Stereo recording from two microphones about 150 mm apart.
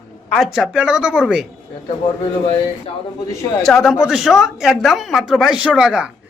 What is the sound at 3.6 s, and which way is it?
Speech, centre (ahead or behind).